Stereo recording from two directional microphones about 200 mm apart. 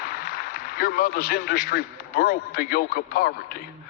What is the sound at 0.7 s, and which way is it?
A man's voice, 50° left (ahead or behind).